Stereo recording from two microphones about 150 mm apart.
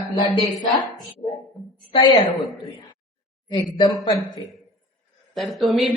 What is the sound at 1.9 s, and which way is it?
Speech, 35° left (ahead or behind).